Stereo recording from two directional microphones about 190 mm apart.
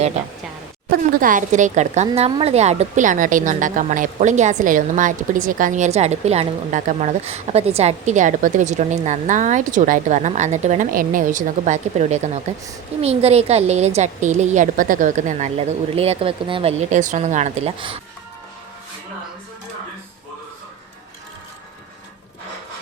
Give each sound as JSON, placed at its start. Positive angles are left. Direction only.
{"t": 0.9, "sound": "a woman's voice", "side_deg": -45}